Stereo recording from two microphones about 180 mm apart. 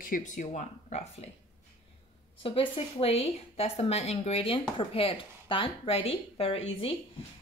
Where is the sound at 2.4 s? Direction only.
30° left (ahead or behind).